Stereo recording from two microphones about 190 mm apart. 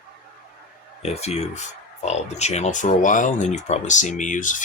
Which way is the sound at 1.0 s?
35° left (ahead or behind).